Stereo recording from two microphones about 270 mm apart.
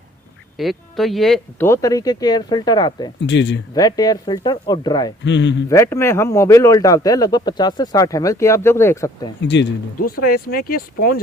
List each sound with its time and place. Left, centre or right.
0.5 s speech: centre
3.2 s speech: left
3.8 s speech: centre
5.2 s speech: left
5.6 s speech: centre
9.4 s speech: left